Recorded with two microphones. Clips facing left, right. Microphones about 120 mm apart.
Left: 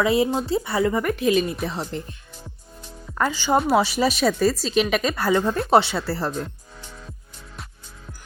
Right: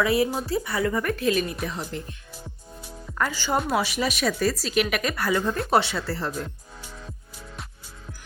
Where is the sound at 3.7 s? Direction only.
30° left (ahead or behind).